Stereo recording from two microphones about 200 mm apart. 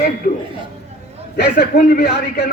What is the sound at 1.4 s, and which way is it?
A man's voice, 50° left (ahead or behind).